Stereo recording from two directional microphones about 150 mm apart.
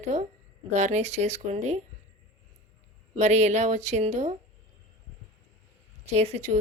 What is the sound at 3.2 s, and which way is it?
A woman's voice, 50° right (ahead or behind).